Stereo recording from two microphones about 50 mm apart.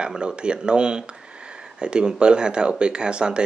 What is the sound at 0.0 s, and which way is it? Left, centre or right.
Speech, centre.